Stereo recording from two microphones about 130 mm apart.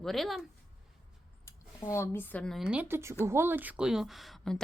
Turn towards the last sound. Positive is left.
turn(degrees=0)  # may be behind; listen again after turning